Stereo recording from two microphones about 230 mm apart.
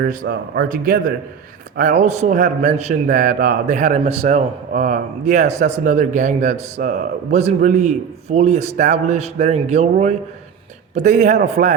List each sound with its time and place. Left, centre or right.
0.0 s a man's voice: right